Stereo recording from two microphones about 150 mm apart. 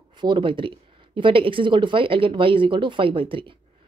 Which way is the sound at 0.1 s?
30° right (ahead or behind).